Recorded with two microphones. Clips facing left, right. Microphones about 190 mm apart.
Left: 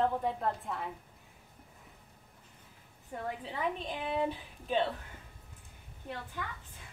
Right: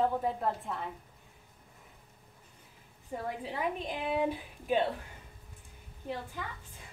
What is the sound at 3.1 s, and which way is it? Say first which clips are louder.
A woman's voice: right 2 dB; 10° right (ahead or behind).